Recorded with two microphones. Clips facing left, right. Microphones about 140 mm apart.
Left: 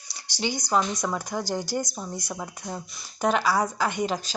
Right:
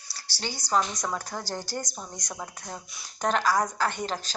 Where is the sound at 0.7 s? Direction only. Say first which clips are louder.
Left 1 dB; 5° left (ahead or behind).